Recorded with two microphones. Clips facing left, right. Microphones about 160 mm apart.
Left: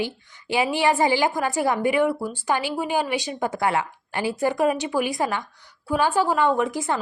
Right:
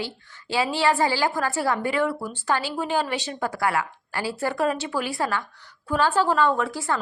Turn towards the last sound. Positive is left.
turn(degrees=20)  # may be behind; listen again after turning